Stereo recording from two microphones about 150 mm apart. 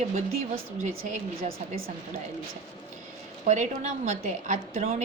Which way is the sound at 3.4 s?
50° right (ahead or behind).